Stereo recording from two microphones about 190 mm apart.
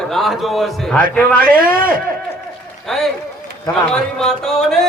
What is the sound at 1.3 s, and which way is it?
Speech, 50° right (ahead or behind).